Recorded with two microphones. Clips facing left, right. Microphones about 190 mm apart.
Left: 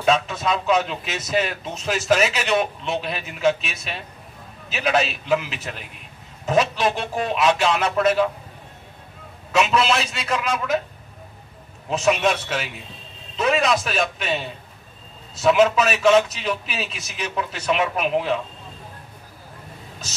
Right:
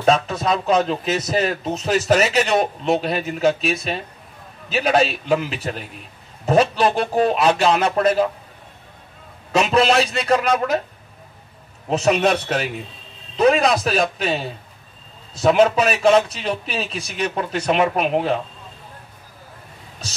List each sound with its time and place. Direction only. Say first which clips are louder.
0.0 s a man's voice: right 3 dB; 35° right (ahead or behind)
9.6 s a man's voice: right 3 dB; 35° right (ahead or behind)
12.0 s a man's voice: right 2 dB; 35° right (ahead or behind)